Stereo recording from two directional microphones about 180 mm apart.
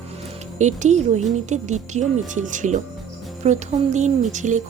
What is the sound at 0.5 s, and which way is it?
Music, 40° right (ahead or behind).